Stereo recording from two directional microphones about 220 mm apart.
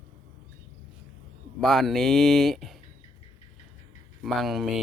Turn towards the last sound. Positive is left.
turn(degrees=0)  # may be behind; listen again after turning